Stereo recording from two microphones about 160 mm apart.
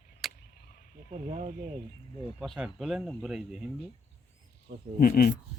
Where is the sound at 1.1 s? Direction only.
50° right (ahead or behind).